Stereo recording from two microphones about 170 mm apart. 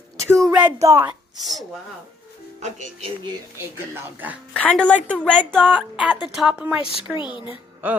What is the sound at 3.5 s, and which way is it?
Speech, 10° right (ahead or behind).